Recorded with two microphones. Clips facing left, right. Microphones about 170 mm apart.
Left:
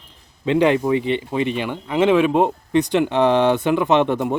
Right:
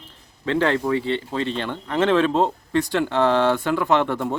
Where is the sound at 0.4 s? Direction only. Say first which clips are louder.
Left 4 dB; 15° left (ahead or behind).